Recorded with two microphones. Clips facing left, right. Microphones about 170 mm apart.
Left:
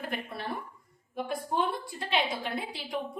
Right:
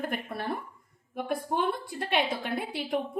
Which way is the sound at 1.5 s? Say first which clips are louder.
Even; 55° right (ahead or behind).